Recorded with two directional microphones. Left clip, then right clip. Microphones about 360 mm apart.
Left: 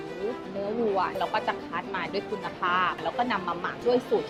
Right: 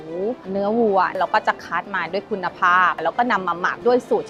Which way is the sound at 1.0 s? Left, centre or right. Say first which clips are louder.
Right 9 dB; right.